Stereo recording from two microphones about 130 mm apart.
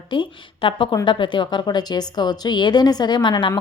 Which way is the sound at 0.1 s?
40° left (ahead or behind).